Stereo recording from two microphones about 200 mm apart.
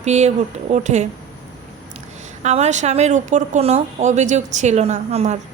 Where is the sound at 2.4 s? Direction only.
35° right (ahead or behind).